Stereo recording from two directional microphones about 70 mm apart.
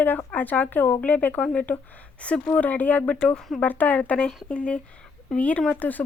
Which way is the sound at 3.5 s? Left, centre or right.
Left.